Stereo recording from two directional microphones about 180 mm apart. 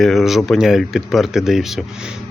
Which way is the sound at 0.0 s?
Centre (ahead or behind).